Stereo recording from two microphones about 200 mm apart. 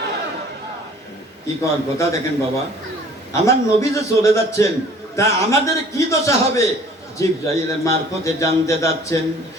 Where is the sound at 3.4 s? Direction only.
15° left (ahead or behind).